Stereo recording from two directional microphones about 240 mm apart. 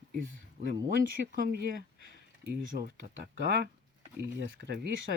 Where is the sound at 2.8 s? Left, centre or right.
Right.